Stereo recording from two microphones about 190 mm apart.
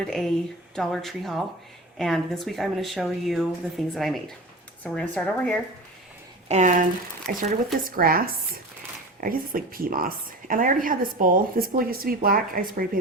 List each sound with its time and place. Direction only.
0.0 s speech: centre (ahead or behind)
6.5 s a woman's voice: 40° right (ahead or behind)